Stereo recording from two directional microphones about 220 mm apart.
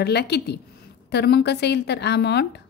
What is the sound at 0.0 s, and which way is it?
A woman's voice, 50° left (ahead or behind).